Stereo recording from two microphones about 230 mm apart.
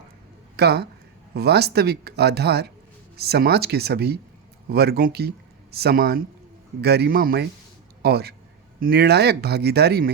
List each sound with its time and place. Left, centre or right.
0.5 s speech: right